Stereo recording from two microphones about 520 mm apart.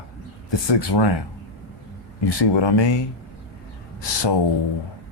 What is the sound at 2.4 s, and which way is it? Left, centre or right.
Speech, left.